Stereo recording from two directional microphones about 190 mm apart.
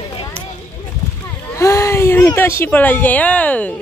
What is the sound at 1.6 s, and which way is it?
Speech, 15° left (ahead or behind).